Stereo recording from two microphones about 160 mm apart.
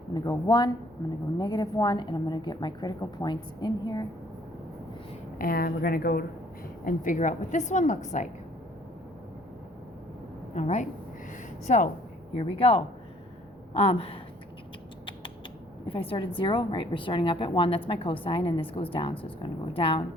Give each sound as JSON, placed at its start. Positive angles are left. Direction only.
{"t": 0.1, "sound": "a woman's voice", "side_deg": 25}
{"t": 5.4, "sound": "a woman's voice", "side_deg": 70}
{"t": 6.8, "sound": "a woman's voice", "side_deg": 55}
{"t": 10.5, "sound": "a woman's voice", "side_deg": 45}
{"t": 11.3, "sound": "a sound", "side_deg": 50}
{"t": 12.4, "sound": "a woman's voice", "side_deg": 35}
{"t": 15.9, "sound": "a woman's voice", "side_deg": 35}